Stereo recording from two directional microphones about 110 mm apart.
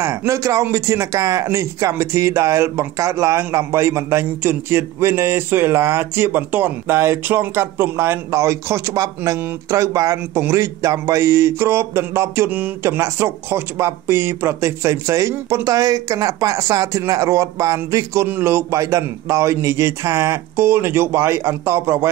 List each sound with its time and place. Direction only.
0.0 s speech: 25° right (ahead or behind)